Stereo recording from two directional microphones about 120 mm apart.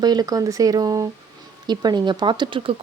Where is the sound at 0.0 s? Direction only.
35° right (ahead or behind).